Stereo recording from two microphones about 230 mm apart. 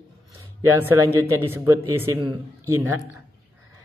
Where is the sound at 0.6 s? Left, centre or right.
Centre.